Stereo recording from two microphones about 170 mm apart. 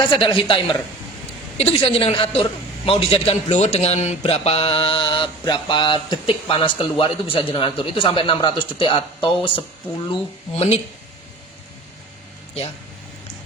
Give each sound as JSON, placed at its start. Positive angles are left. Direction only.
{"t": 0.1, "sound": "a man's voice", "side_deg": 30}